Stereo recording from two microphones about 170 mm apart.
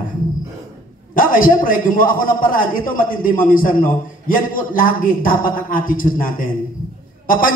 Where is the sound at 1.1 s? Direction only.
55° left (ahead or behind).